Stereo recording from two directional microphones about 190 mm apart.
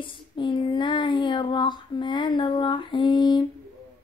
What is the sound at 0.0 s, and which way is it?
Child singing, 25° left (ahead or behind).